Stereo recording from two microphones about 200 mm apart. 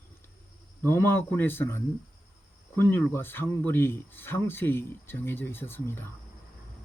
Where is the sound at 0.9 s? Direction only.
10° left (ahead or behind).